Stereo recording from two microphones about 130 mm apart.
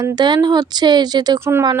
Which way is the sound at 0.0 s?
35° right (ahead or behind).